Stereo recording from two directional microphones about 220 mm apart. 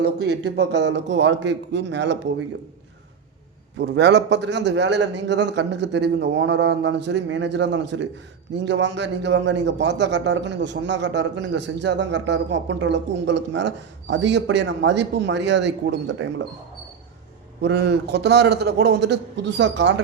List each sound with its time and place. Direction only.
0.0 s a man's voice: 50° right (ahead or behind)
3.8 s a man's voice: 50° right (ahead or behind)
17.6 s a man's voice: 50° right (ahead or behind)